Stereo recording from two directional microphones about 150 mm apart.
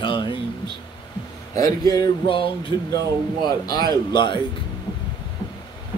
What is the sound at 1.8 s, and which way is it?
Speech, 25° left (ahead or behind).